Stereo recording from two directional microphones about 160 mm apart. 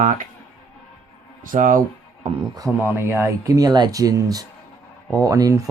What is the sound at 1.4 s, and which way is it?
Speech, 55° right (ahead or behind).